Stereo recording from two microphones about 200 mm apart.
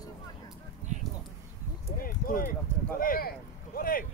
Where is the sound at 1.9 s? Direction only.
45° left (ahead or behind).